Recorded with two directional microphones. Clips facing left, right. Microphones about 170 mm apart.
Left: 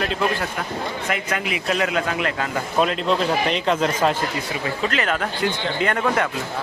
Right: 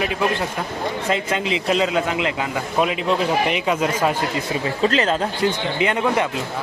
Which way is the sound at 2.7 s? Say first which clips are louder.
Even; 10° right (ahead or behind).